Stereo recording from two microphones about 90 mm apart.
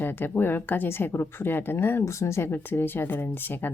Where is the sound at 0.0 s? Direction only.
20° left (ahead or behind).